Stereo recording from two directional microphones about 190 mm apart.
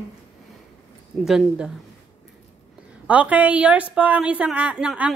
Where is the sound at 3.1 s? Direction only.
5° right (ahead or behind).